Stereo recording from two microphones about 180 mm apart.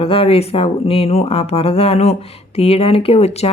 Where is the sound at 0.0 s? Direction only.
30° left (ahead or behind).